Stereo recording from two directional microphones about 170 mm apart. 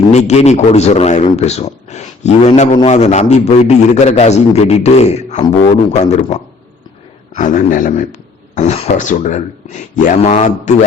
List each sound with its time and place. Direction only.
0.1 s a man's voice: 40° left (ahead or behind)
7.3 s speech: 50° left (ahead or behind)
8.5 s speech: 40° left (ahead or behind)